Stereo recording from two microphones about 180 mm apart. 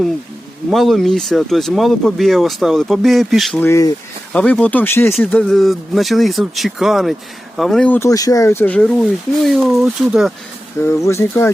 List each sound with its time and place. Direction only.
0.7 s speech: centre (ahead or behind)
3.6 s speech: 15° left (ahead or behind); by 10.3 s 5° right (ahead or behind)
10.8 s speech: 15° left (ahead or behind)